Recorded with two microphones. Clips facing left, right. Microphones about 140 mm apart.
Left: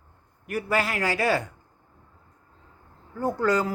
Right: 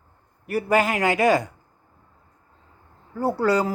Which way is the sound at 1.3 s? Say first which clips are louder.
Right 5 dB; 10° right (ahead or behind).